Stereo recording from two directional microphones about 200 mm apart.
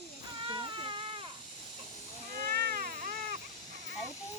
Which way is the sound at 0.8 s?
25° right (ahead or behind).